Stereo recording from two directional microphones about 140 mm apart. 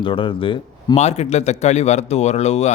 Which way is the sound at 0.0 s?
40° left (ahead or behind).